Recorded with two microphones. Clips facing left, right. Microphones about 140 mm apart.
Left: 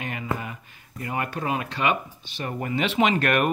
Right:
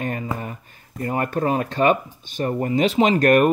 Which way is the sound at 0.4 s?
40° right (ahead or behind).